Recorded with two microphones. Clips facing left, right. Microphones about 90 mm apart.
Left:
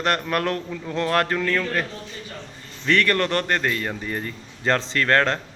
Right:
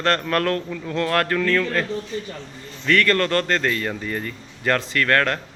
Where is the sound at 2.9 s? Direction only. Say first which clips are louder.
Right 2 dB; 20° left (ahead or behind).